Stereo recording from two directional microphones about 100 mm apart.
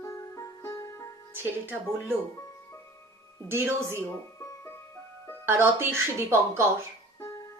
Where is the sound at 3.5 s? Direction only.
25° right (ahead or behind).